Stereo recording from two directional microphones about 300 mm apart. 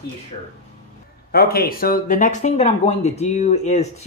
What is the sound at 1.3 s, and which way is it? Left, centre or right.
Speech, left.